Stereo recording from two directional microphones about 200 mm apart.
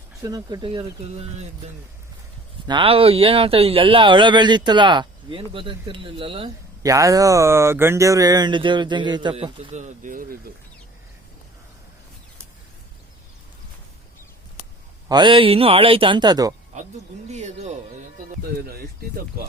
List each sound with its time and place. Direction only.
0.2 s speech: 20° right (ahead or behind); by 10.3 s 40° right (ahead or behind)
15.1 s speech: 25° right (ahead or behind)
17.3 s speech: 35° right (ahead or behind)
19.0 s speech: 50° right (ahead or behind)